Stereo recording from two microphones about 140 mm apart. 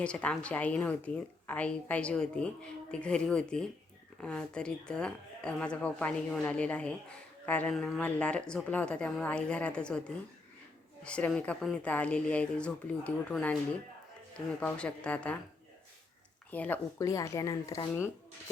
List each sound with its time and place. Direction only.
0.0 s a woman's voice: 10° left (ahead or behind)
11.0 s a woman's voice: 10° left (ahead or behind)
14.6 s a woman's voice: 10° left (ahead or behind)
16.5 s speech: 10° left (ahead or behind)